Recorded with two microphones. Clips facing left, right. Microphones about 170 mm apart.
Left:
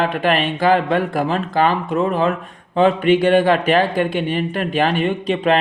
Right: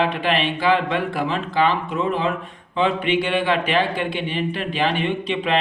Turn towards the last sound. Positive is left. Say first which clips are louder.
# left 4 dB
turn(degrees=45)  # may be behind; listen again after turning